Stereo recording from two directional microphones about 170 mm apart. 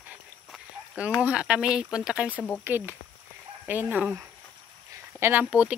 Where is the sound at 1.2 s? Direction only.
5° right (ahead or behind).